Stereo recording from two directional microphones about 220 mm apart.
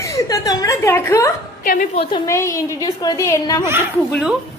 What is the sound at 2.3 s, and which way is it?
Speech, 15° left (ahead or behind).